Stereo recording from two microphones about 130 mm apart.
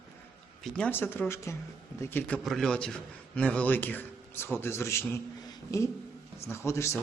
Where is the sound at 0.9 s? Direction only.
15° left (ahead or behind).